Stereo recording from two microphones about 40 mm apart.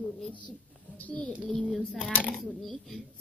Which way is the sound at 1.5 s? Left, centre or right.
Centre.